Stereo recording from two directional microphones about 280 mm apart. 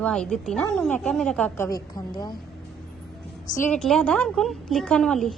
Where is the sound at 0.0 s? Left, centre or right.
Centre.